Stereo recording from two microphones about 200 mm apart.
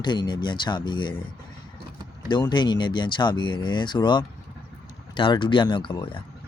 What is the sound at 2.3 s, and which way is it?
Speech, 20° left (ahead or behind).